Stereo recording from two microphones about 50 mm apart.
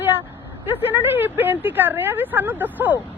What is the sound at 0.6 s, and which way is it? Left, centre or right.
Speech, right.